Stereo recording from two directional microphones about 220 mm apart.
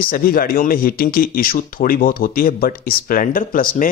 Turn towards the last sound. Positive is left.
turn(degrees=40)  # may be behind; listen again after turning